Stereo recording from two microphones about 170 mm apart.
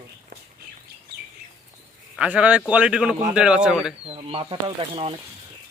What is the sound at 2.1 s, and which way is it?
A man's voice, 5° right (ahead or behind).